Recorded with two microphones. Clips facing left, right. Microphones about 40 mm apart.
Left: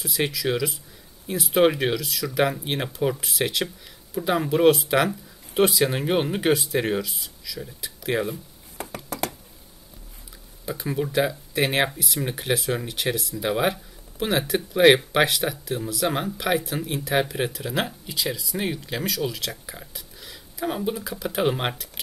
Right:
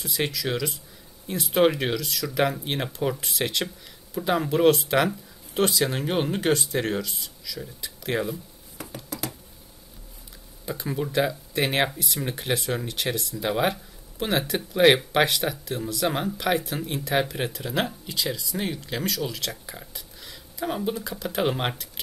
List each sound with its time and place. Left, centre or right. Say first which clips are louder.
0.0 s speech: left 2 dB; centre
8.7 s a sound: left 3 dB; left
10.6 s speech: left 2 dB; centre